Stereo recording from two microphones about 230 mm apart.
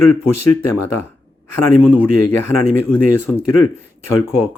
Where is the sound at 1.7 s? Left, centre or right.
Centre.